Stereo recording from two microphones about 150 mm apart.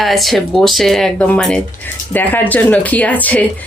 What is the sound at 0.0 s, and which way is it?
Speech, centre (ahead or behind).